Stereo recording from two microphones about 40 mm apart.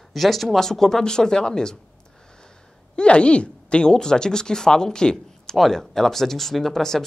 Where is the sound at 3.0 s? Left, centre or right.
Left.